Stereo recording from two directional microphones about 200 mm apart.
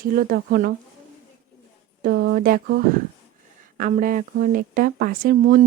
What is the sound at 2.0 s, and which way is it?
A woman's voice, 55° right (ahead or behind).